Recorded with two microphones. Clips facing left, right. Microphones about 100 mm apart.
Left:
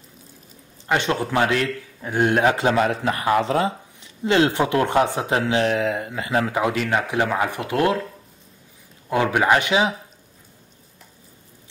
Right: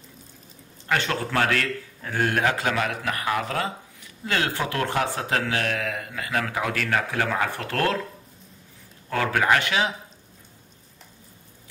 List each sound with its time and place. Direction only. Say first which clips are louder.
0.8 s a man's voice: left 4 dB; 20° left (ahead or behind)
9.1 s a man's voice: left 4 dB; 20° left (ahead or behind)